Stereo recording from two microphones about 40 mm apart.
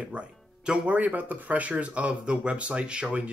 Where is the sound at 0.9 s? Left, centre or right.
Right.